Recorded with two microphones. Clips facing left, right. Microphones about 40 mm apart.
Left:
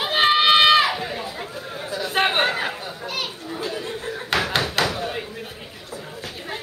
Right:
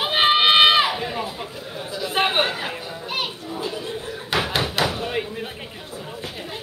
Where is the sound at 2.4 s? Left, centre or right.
Left.